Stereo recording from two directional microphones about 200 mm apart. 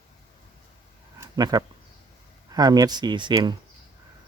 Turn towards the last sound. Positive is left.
turn(degrees=-20)  # may be behind; listen again after turning